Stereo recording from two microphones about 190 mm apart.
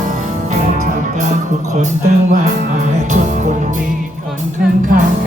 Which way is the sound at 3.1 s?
40° right (ahead or behind).